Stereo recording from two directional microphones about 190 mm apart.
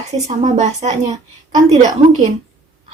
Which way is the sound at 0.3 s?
35° right (ahead or behind).